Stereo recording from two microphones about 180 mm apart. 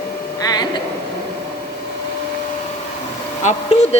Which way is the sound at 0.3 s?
20° left (ahead or behind).